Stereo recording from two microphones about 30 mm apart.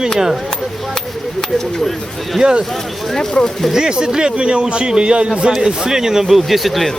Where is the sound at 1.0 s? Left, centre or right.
Centre.